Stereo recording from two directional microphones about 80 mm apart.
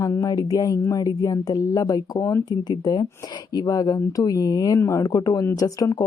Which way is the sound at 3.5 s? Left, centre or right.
Left.